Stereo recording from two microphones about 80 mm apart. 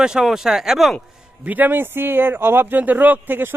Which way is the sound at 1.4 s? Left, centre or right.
Right.